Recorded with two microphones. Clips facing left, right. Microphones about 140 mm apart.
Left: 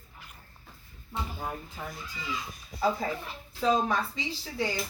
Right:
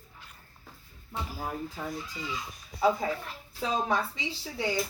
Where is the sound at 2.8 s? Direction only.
Centre (ahead or behind).